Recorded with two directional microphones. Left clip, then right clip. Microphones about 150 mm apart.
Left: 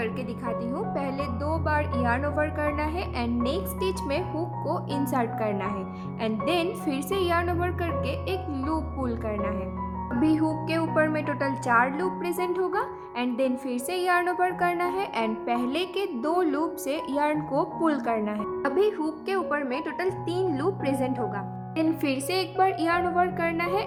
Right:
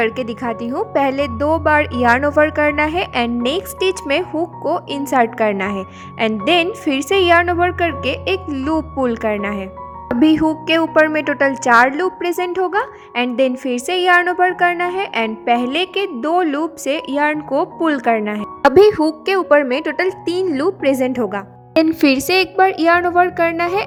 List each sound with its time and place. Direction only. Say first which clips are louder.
0.4 s a woman's voice: right 7 dB; 50° right (ahead or behind); by 18.4 s 30° right (ahead or behind)
18.6 s a woman's voice: right 15 dB; 45° right (ahead or behind)